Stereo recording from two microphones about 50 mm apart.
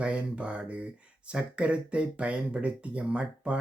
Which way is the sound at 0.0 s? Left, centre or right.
Right.